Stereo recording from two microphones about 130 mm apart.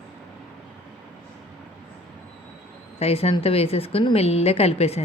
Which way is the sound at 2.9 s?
50° left (ahead or behind).